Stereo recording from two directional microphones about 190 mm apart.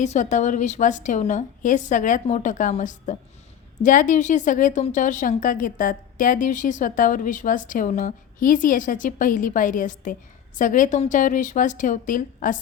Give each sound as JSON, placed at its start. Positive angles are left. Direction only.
{"t": 0.0, "sound": "a woman's voice", "side_deg": 40}